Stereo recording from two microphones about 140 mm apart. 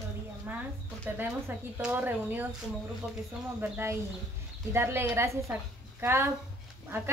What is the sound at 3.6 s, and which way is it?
A woman's voice, 15° right (ahead or behind).